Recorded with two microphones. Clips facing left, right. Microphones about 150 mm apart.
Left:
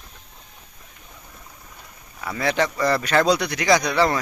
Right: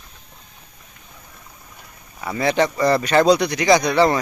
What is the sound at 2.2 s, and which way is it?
Speech, 20° right (ahead or behind).